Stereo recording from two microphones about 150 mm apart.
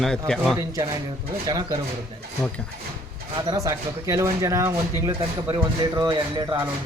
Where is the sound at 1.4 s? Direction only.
30° right (ahead or behind).